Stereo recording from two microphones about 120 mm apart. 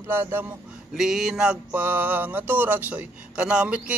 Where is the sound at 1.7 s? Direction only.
15° right (ahead or behind).